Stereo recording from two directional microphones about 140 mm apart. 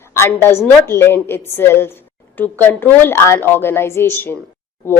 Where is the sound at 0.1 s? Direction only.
15° left (ahead or behind).